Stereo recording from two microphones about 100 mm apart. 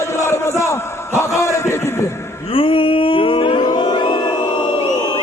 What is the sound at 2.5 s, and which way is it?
Music, 60° left (ahead or behind).